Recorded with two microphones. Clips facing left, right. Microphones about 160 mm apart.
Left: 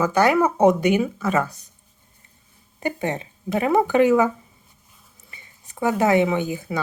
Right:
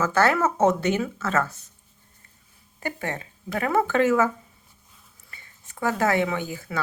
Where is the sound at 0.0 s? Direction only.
15° left (ahead or behind).